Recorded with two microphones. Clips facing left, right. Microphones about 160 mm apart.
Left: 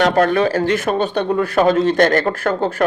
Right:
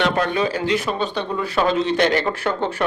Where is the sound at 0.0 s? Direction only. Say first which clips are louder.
Left 6 dB; 50° left (ahead or behind).